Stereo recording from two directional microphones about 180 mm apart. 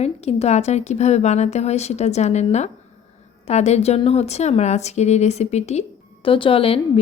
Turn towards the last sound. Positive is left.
turn(degrees=30)  # may be behind; listen again after turning